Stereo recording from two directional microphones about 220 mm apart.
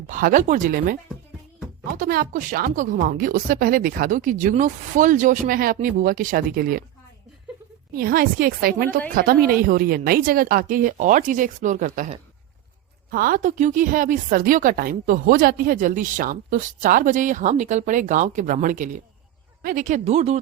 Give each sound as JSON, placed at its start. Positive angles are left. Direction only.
{"t": 0.1, "sound": "speech", "side_deg": -40}
{"t": 2.0, "sound": "speech", "side_deg": -40}
{"t": 7.9, "sound": "speech", "side_deg": -40}